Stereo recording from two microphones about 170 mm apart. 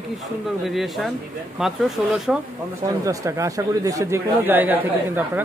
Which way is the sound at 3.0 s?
20° right (ahead or behind).